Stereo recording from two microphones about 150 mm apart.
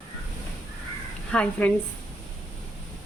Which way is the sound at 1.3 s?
10° left (ahead or behind).